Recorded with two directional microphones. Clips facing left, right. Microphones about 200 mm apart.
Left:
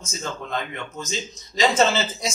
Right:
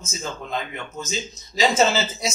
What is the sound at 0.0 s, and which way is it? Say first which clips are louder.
A man's voice: even; 5° right (ahead or behind).